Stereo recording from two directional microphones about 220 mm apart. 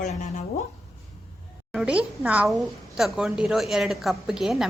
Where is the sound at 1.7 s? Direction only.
5° right (ahead or behind).